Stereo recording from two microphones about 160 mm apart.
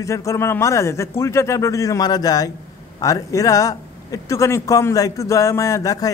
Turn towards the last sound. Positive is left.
turn(degrees=20)  # may be behind; listen again after turning